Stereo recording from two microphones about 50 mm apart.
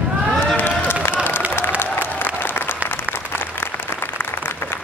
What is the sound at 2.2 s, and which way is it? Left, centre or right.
Applause, left.